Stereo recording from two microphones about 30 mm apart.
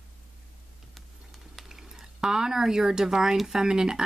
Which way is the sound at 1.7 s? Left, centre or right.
Centre.